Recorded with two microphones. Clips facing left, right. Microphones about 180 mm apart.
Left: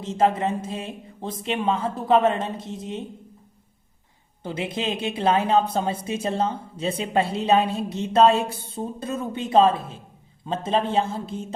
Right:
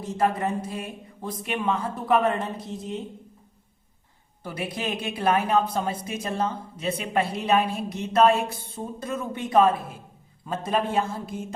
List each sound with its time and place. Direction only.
0.0 s a woman's voice: 25° left (ahead or behind)
4.4 s a woman's voice: 25° left (ahead or behind)